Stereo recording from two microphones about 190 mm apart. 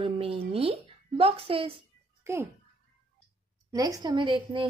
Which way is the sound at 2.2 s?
15° right (ahead or behind).